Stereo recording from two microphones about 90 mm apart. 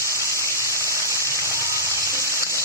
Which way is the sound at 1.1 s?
35° left (ahead or behind).